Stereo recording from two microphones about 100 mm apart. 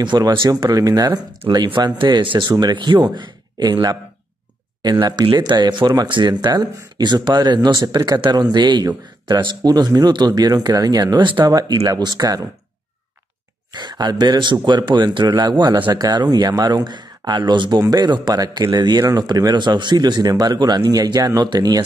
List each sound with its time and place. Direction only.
0.0 s speech: 50° right (ahead or behind)
0.5 s speech: 35° right (ahead or behind)
13.7 s speech: 45° right (ahead or behind)